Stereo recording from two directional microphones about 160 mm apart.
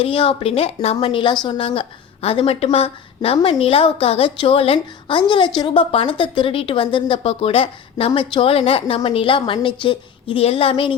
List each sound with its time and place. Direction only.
0.0 s speech: 35° left (ahead or behind)